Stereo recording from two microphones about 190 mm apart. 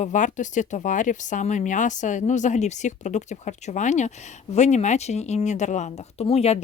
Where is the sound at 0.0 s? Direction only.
40° left (ahead or behind).